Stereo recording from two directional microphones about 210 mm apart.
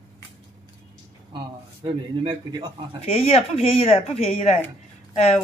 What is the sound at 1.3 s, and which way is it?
Speech, 25° right (ahead or behind).